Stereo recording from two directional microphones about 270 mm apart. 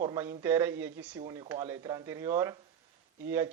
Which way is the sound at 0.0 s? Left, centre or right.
Centre.